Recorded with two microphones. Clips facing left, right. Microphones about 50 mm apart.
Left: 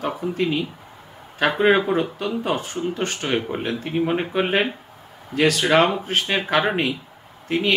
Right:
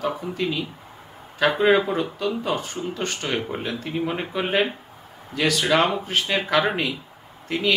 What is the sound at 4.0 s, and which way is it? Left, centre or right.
Speech, left.